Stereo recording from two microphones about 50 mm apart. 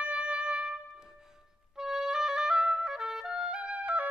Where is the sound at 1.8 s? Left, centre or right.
Centre; by 4.0 s right.